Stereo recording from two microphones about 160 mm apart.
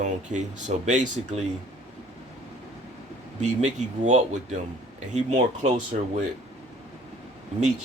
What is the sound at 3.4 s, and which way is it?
Speech, 50° right (ahead or behind).